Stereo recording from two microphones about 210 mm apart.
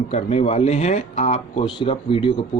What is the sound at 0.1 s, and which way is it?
Speech, 30° left (ahead or behind).